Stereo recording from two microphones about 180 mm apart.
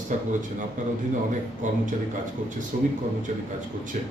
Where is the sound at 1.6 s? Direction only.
45° right (ahead or behind).